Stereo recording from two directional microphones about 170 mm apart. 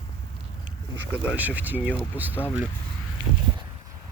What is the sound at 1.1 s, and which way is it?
Speech, 10° right (ahead or behind).